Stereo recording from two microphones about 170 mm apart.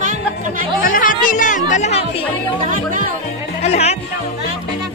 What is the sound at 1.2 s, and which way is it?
Speech, 50° left (ahead or behind).